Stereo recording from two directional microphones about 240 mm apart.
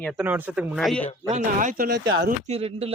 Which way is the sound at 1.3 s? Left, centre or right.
Right.